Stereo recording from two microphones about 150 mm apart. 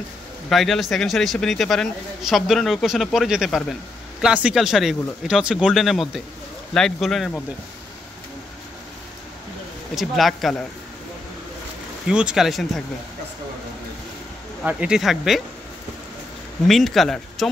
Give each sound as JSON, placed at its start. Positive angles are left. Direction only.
{"t": 0.5, "sound": "speech", "side_deg": 0}
{"t": 9.9, "sound": "speech", "side_deg": 0}
{"t": 12.1, "sound": "speech", "side_deg": -5}
{"t": 14.6, "sound": "speech", "side_deg": -10}
{"t": 16.6, "sound": "speech", "side_deg": 0}